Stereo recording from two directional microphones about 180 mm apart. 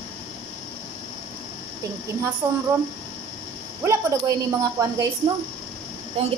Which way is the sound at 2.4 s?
15° right (ahead or behind).